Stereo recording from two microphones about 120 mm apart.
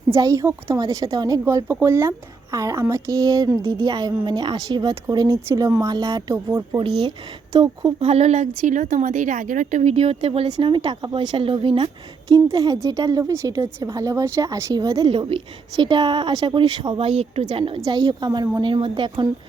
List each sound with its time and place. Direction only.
0.2 s a woman's voice: 30° right (ahead or behind)
7.9 s speech: 60° right (ahead or behind)
12.3 s a woman's voice: 30° right (ahead or behind)
17.0 s a woman's voice: 55° right (ahead or behind)
17.8 s a woman's voice: 35° right (ahead or behind)